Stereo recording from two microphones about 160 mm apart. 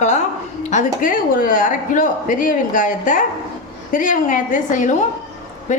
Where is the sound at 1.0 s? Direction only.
60° left (ahead or behind).